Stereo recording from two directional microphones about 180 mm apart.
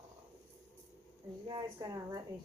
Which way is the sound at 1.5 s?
25° right (ahead or behind).